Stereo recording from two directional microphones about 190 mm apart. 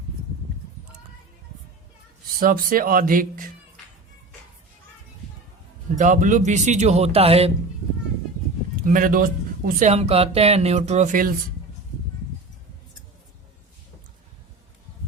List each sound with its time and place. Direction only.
2.4 s speech: 50° right (ahead or behind)
6.0 s speech: 45° right (ahead or behind)
8.8 s speech: 45° right (ahead or behind)